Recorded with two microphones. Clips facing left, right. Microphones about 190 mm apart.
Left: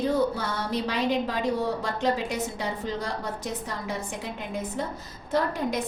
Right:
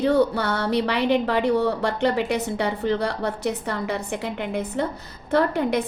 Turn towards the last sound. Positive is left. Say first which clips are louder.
# right 6 dB
turn(degrees=-65)  # may be behind; listen again after turning